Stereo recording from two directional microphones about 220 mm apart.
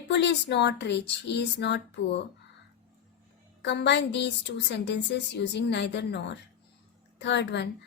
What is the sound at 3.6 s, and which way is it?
A woman's voice, 50° left (ahead or behind).